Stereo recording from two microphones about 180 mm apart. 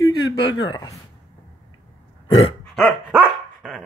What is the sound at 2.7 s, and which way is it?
Dog, centre (ahead or behind).